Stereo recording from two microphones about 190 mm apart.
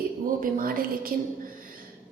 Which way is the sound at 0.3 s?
50° right (ahead or behind).